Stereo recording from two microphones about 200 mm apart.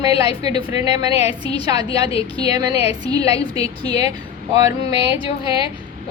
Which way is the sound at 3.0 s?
20° right (ahead or behind).